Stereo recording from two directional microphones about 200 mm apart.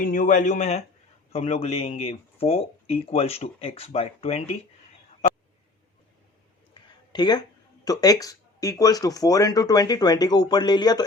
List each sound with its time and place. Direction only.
0.0 s speech: 40° left (ahead or behind)
7.1 s speech: 20° left (ahead or behind)